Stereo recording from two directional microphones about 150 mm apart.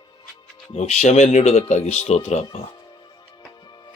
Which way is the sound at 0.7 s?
45° left (ahead or behind).